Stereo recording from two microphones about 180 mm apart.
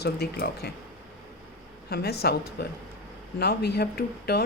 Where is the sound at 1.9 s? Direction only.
60° left (ahead or behind).